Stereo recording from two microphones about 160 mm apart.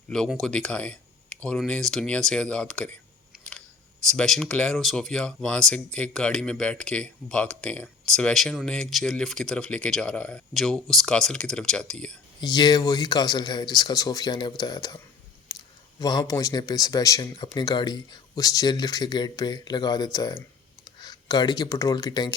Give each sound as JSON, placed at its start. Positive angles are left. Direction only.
{"t": 0.1, "sound": "speech", "side_deg": 0}
{"t": 3.3, "sound": "camera", "side_deg": -5}
{"t": 4.1, "sound": "speech", "side_deg": 5}
{"t": 12.4, "sound": "speech", "side_deg": 25}
{"t": 15.5, "sound": "clicking", "side_deg": 25}
{"t": 16.0, "sound": "speech", "side_deg": 25}